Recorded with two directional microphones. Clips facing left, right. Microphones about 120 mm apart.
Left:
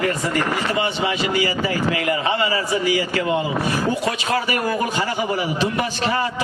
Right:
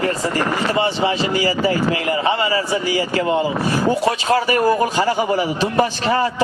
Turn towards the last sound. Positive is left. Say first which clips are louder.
# right 5 dB
turn(degrees=-35)  # may be behind; listen again after turning